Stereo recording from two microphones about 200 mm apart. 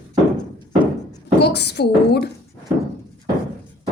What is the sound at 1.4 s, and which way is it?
Speech, 55° left (ahead or behind).